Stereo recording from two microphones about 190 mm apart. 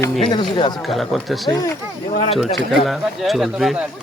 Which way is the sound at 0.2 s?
25° left (ahead or behind).